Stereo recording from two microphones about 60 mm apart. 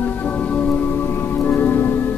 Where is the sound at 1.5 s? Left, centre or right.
Left.